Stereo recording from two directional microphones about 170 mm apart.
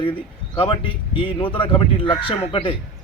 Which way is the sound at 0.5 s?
30° left (ahead or behind).